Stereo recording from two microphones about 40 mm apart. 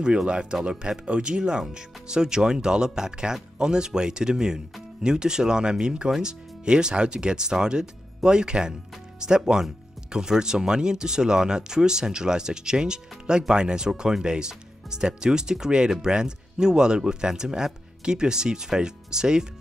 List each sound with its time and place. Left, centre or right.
0.0 s speech: right